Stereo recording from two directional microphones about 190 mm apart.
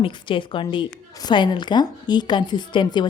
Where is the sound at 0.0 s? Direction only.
25° left (ahead or behind).